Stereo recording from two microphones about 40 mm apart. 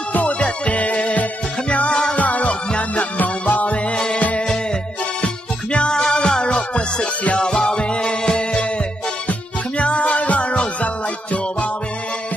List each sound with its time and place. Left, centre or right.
0.1 s music: left
2.1 s music: left
3.9 s music: left
5.2 s music: left
9.8 s music: left